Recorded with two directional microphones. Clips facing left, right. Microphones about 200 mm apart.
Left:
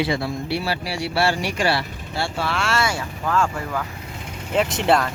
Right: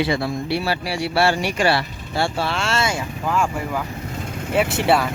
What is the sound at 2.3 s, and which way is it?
Speech, 25° right (ahead or behind).